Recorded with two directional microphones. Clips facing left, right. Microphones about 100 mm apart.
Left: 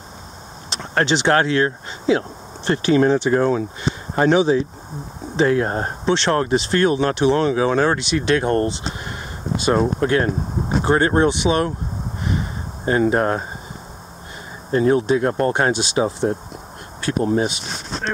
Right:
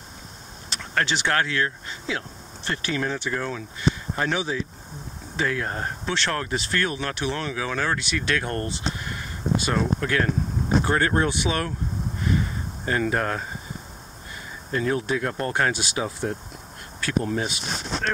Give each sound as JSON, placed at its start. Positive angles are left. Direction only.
{"t": 0.7, "sound": "speech", "side_deg": 25}
{"t": 12.2, "sound": "a sound", "side_deg": 20}
{"t": 14.7, "sound": "speech", "side_deg": 30}